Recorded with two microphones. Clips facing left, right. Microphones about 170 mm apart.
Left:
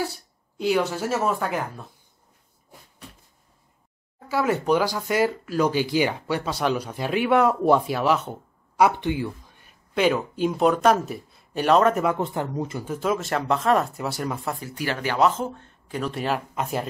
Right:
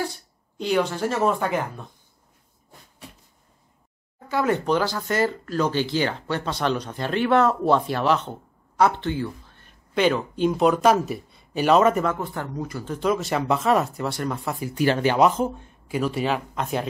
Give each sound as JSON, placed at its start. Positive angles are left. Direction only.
{"t": 0.6, "sound": "speech", "side_deg": 5}
{"t": 4.3, "sound": "speech", "side_deg": 5}
{"t": 12.2, "sound": "speech", "side_deg": 20}
{"t": 12.8, "sound": "speech", "side_deg": 5}
{"t": 14.8, "sound": "speech", "side_deg": -25}